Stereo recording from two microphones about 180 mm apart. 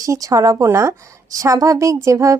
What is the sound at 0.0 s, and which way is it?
A woman's voice, 20° right (ahead or behind).